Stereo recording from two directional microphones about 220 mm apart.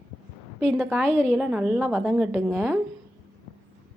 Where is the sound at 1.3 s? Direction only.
5° right (ahead or behind).